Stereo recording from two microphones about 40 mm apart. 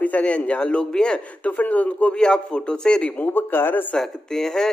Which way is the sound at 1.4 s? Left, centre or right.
Left.